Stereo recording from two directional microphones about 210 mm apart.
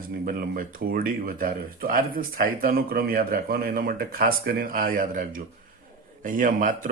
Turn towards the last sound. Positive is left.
turn(degrees=-40)  # may be behind; listen again after turning